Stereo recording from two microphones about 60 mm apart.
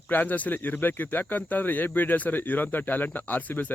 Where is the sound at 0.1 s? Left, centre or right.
Left.